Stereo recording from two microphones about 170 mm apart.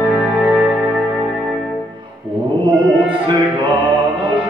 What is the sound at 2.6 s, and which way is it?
Music, 30° right (ahead or behind).